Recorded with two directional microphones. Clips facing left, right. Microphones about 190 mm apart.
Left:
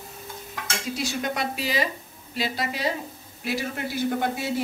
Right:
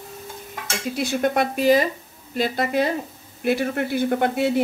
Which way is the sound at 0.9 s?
55° right (ahead or behind).